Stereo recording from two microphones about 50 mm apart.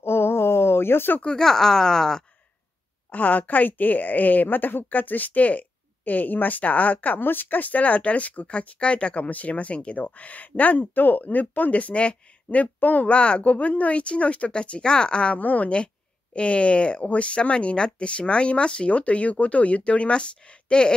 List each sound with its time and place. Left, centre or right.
0.0 s a sound: left
1.2 s speech: centre
3.1 s a woman's voice: left
15.3 s speech: left